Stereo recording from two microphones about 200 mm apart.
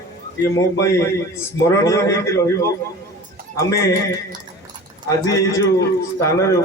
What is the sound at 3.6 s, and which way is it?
Speech, 15° left (ahead or behind).